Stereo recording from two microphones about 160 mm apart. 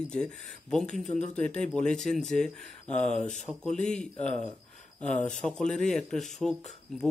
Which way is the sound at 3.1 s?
50° left (ahead or behind).